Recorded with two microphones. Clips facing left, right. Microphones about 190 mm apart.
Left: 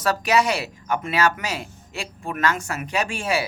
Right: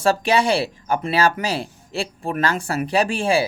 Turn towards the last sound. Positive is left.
turn(degrees=-30)  # may be behind; listen again after turning